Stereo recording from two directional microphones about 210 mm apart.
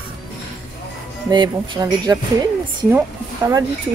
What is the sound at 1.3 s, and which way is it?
Speech, 20° right (ahead or behind).